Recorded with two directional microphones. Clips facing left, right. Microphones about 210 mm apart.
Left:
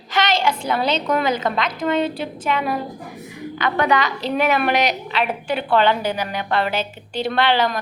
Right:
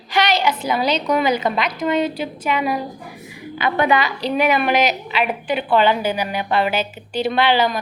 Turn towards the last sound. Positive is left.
turn(degrees=-5)  # may be behind; listen again after turning